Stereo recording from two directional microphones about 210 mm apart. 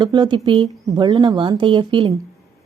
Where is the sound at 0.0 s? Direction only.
20° right (ahead or behind).